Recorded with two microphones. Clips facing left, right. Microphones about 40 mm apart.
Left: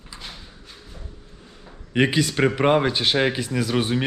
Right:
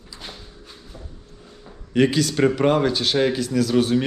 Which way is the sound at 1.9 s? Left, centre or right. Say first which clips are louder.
Right 2 dB; left.